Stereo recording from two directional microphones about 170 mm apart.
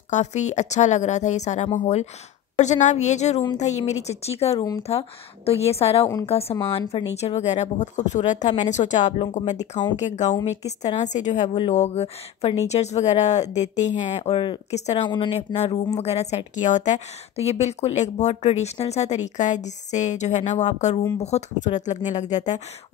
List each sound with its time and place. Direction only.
0.1 s a woman's voice: 45° left (ahead or behind)
9.6 s speech: 25° left (ahead or behind)
9.9 s a woman's voice: 45° left (ahead or behind)